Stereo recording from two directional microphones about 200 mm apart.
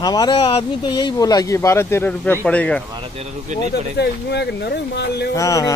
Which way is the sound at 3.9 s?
55° left (ahead or behind).